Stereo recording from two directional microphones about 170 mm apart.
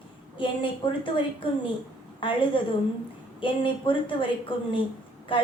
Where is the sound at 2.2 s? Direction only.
30° left (ahead or behind).